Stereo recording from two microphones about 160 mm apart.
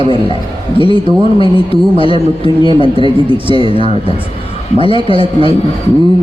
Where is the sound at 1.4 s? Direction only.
35° left (ahead or behind).